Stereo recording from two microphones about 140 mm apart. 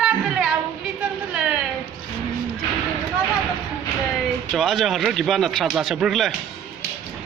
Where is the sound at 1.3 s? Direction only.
5° right (ahead or behind).